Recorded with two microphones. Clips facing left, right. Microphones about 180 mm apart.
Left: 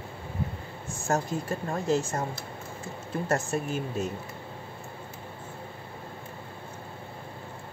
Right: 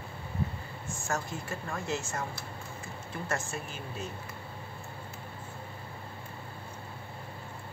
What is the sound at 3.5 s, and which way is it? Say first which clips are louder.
Speech: left 9 dB; 45° left (ahead or behind).